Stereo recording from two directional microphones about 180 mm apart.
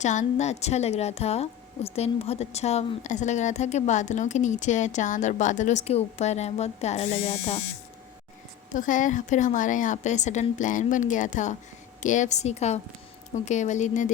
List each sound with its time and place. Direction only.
0.0 s a woman's voice: 40° left (ahead or behind)
8.7 s a woman's voice: 45° left (ahead or behind)